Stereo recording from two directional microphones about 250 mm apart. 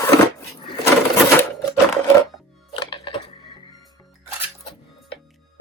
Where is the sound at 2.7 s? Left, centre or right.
Centre.